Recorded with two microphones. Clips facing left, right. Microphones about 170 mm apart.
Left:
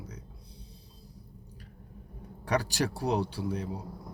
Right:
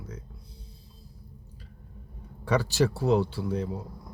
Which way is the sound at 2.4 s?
15° left (ahead or behind).